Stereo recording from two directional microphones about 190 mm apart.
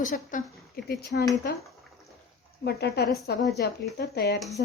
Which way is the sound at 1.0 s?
60° left (ahead or behind).